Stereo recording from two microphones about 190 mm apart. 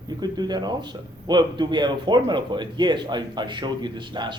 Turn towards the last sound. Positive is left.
turn(degrees=-25)  # may be behind; listen again after turning